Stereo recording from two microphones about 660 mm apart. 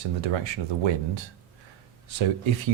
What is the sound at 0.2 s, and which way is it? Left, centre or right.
Speech, right.